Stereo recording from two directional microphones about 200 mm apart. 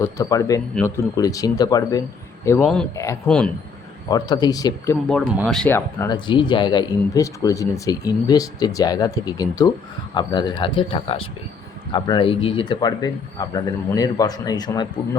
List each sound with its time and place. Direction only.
0.0 s speech: 15° left (ahead or behind)
3.2 s speech: 5° left (ahead or behind)
4.1 s speech: 20° left (ahead or behind)
5.0 s speech: 5° left (ahead or behind); by 14.8 s 20° left (ahead or behind)